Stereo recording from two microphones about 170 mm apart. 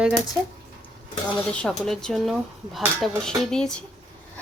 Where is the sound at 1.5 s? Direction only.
5° left (ahead or behind).